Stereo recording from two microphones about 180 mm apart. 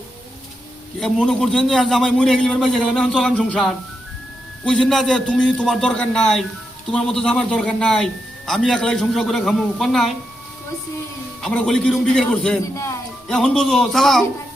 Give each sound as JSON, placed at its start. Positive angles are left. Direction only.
{"t": 0.9, "sound": "a man's voice", "side_deg": 5}
{"t": 11.4, "sound": "a man's voice", "side_deg": 5}
{"t": 12.7, "sound": "music", "side_deg": 15}
{"t": 13.2, "sound": "a man's voice", "side_deg": 5}